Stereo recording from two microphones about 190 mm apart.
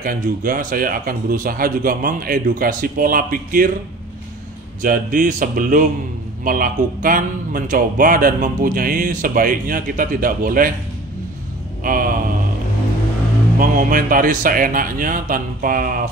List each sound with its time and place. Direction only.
0.0 s a man's voice: 45° right (ahead or behind)
4.8 s a man's voice: 45° right (ahead or behind)
11.8 s a man's voice: 45° right (ahead or behind)
13.6 s a man's voice: 45° right (ahead or behind)